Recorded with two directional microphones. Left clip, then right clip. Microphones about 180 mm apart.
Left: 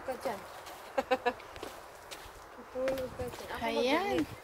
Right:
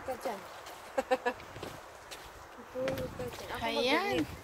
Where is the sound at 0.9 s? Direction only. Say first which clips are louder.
Even; 35° right (ahead or behind).